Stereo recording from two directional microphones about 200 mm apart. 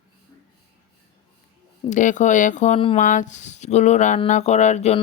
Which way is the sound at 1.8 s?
40° left (ahead or behind).